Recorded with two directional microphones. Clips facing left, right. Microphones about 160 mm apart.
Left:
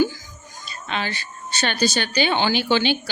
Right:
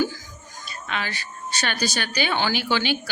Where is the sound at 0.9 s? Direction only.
25° left (ahead or behind).